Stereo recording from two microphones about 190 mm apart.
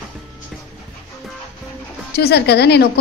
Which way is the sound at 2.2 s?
60° left (ahead or behind).